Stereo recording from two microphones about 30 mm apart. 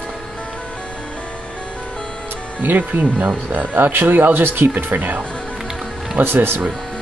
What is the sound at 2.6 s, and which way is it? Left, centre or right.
Speech, right.